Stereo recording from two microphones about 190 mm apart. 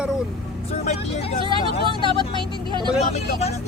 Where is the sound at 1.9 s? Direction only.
25° left (ahead or behind).